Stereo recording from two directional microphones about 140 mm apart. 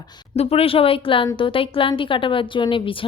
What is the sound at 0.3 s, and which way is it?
A woman's voice, 45° left (ahead or behind).